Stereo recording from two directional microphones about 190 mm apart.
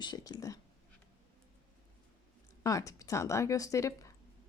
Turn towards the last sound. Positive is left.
turn(degrees=15)  # may be behind; listen again after turning